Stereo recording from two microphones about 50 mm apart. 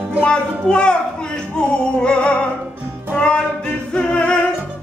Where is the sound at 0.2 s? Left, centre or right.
Centre.